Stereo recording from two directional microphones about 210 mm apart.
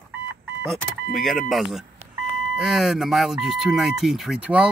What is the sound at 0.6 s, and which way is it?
Speech, centre (ahead or behind).